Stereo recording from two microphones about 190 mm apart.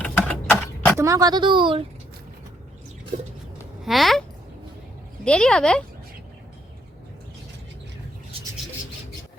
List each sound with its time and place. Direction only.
0.0 s a sound: 10° left (ahead or behind)
0.9 s speech: 15° right (ahead or behind)
3.8 s speech: centre (ahead or behind)
5.2 s speech: 5° left (ahead or behind)